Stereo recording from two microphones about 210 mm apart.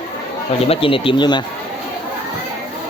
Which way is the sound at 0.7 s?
25° left (ahead or behind).